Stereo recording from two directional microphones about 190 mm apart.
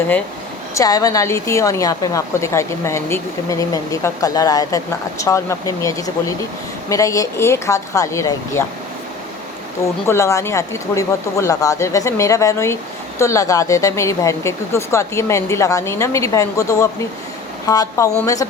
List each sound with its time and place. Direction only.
0.7 s a woman's voice: 15° left (ahead or behind)
10.1 s a woman's voice: 15° left (ahead or behind)